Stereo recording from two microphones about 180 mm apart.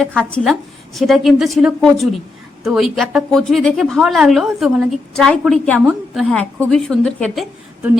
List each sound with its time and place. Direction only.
0.2 s a woman's voice: 5° left (ahead or behind)